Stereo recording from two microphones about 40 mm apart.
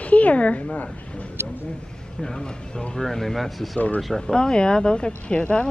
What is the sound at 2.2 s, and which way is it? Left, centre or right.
Speech, centre.